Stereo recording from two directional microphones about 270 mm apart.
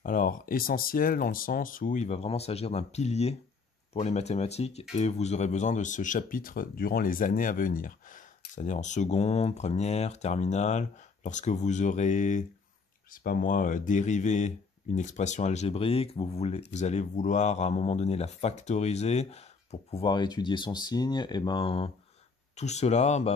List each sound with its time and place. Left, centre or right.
0.0 s speech: left